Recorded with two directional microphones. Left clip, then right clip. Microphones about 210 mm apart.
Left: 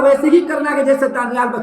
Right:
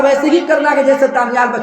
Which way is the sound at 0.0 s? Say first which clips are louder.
Even; 10° left (ahead or behind).